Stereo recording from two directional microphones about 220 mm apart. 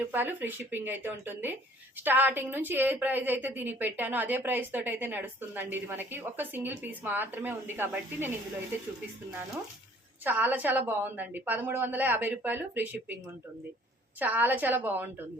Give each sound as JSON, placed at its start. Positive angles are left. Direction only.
{"t": 0.1, "sound": "a woman's voice", "side_deg": -10}
{"t": 10.2, "sound": "a woman's voice", "side_deg": -10}
{"t": 14.2, "sound": "a woman's voice", "side_deg": -5}